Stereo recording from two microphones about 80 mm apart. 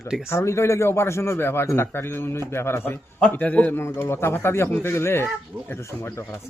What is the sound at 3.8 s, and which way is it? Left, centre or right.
Speech, left.